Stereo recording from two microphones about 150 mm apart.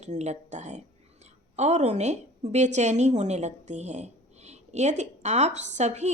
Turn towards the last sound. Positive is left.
turn(degrees=-50)  # may be behind; listen again after turning